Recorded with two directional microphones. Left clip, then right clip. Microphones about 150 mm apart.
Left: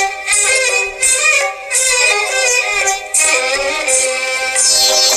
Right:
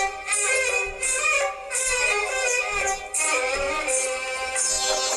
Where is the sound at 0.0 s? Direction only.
30° left (ahead or behind).